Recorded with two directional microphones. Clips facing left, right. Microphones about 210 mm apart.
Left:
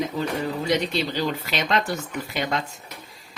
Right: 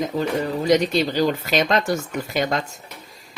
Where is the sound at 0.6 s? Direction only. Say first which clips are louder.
Right 7 dB; 45° right (ahead or behind).